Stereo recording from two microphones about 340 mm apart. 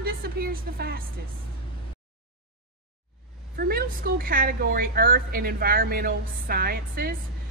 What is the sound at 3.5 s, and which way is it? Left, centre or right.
A woman's voice, right.